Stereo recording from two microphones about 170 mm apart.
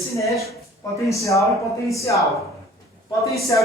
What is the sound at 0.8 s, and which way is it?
A man's voice, 20° left (ahead or behind).